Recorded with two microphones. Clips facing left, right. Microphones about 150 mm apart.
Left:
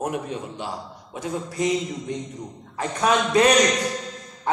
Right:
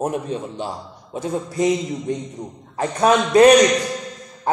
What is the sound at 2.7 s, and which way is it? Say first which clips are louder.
Speech: right 5 dB; 35° right (ahead or behind).